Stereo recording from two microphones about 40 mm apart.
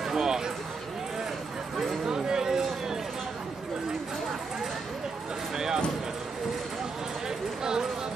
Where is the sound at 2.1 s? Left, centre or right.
Centre.